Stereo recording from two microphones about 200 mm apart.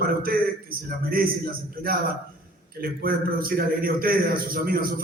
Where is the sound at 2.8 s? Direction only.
45° right (ahead or behind).